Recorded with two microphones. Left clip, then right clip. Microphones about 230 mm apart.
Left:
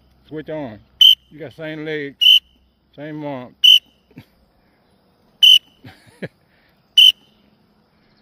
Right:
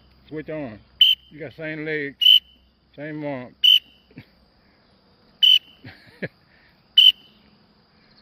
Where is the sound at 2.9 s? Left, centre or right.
Centre.